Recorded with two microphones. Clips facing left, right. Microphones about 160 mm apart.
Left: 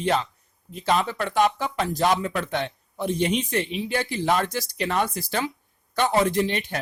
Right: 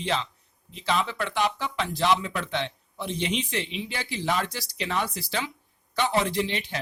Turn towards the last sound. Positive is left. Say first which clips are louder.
# left 4 dB
turn(degrees=50)  # may be behind; listen again after turning